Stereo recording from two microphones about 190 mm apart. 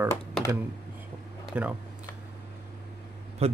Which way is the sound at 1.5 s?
5° right (ahead or behind).